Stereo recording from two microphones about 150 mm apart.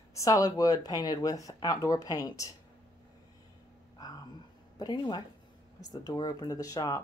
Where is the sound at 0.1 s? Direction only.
20° left (ahead or behind).